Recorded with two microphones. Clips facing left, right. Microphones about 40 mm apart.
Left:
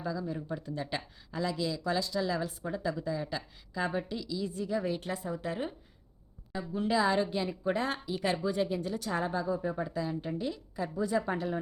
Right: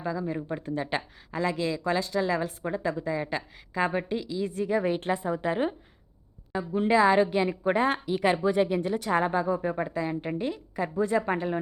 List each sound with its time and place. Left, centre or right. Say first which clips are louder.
0.0 s speech: right 5 dB; right